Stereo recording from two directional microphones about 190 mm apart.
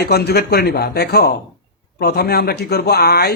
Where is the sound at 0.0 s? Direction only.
55° left (ahead or behind).